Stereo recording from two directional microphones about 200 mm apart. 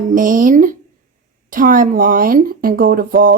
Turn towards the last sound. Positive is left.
turn(degrees=-45)  # may be behind; listen again after turning